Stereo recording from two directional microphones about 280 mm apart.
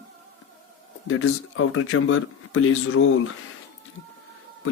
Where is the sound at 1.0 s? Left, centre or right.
Left.